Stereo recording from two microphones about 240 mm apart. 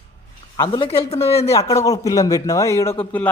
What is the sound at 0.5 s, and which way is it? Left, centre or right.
Speech, centre.